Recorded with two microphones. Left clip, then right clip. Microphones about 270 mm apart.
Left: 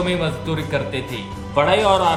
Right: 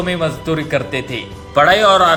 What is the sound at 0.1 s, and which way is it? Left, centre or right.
Speech, centre.